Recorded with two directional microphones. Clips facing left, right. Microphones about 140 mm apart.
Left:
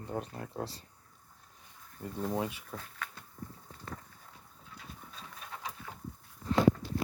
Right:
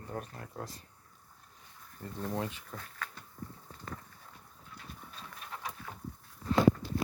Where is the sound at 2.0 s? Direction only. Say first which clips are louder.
Left 2 dB; 10° left (ahead or behind).